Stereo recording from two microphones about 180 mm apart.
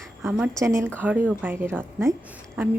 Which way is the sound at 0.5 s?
15° right (ahead or behind).